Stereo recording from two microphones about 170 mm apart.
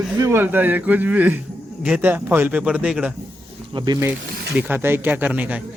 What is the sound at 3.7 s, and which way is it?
Speech, 25° right (ahead or behind).